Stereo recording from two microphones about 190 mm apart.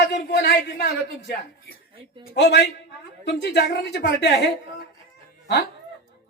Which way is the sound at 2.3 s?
60° left (ahead or behind).